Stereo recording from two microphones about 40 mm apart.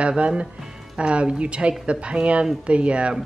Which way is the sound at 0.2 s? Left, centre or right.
Right.